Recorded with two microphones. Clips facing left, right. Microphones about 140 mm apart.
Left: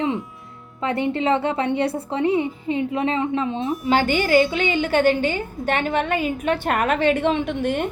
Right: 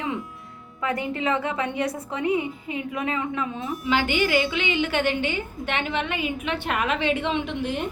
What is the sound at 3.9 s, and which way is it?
A woman's voice, 40° left (ahead or behind).